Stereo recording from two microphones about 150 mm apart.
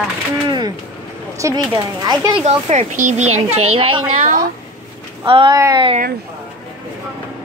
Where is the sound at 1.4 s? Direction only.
20° right (ahead or behind).